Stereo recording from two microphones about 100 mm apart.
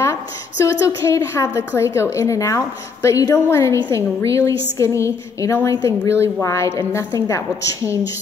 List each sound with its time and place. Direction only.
0.7 s a woman's voice: 30° left (ahead or behind)